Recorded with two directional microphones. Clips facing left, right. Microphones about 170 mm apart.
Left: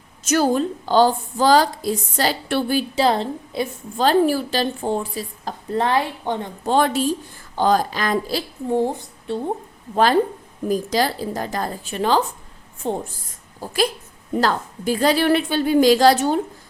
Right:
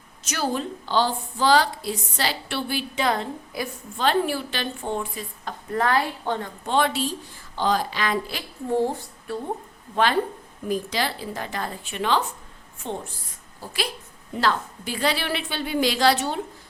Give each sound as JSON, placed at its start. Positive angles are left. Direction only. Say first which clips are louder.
{"t": 0.3, "sound": "a woman's voice", "louder": "left 8 dB", "side_deg": 45}
{"t": 6.7, "sound": "a woman's voice", "louder": "left 5 dB", "side_deg": 45}
{"t": 8.7, "sound": "a woman's voice", "louder": "left 2 dB", "side_deg": 15}
{"t": 9.9, "sound": "a woman's voice", "louder": "left 5 dB", "side_deg": 40}
{"t": 14.3, "sound": "a woman's voice", "louder": "left 4 dB", "side_deg": 40}